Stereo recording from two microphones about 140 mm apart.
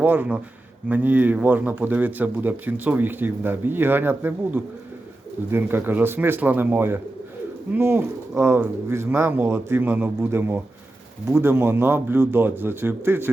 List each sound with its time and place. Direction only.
0.0 s a man's voice: 10° right (ahead or behind)